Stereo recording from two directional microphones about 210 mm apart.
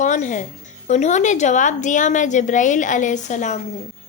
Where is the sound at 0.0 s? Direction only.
35° left (ahead or behind).